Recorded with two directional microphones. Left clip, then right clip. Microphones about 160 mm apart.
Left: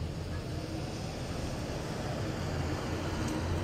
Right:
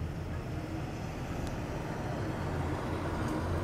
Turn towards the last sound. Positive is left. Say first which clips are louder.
# even
turn(degrees=30)  # may be behind; listen again after turning